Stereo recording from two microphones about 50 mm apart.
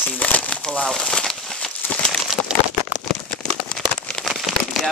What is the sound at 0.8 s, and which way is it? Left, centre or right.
Speech, centre.